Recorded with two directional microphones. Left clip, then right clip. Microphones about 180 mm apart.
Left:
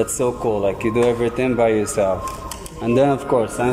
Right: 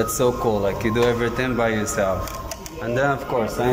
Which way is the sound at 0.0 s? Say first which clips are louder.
Even; 10° left (ahead or behind).